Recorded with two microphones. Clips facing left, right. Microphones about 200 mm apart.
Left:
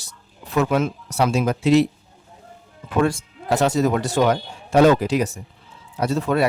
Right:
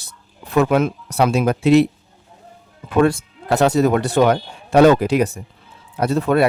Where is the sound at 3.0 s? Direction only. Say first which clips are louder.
Right 5 dB; 60° right (ahead or behind).